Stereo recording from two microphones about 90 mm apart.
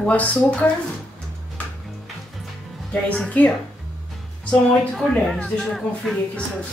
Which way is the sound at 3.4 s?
20° left (ahead or behind).